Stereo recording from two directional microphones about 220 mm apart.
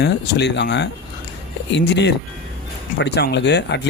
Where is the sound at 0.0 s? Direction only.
50° left (ahead or behind).